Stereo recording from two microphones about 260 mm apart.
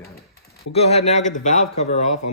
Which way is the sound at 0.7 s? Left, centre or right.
Left.